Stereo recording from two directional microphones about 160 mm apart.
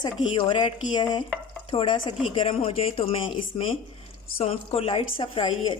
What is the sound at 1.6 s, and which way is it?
Stir, 30° left (ahead or behind).